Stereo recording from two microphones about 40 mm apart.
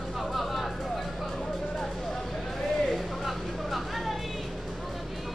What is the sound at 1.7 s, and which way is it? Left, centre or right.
Vehicle, centre.